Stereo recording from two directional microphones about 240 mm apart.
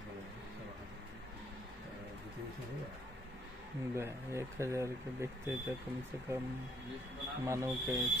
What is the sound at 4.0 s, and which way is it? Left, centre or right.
Speech, centre.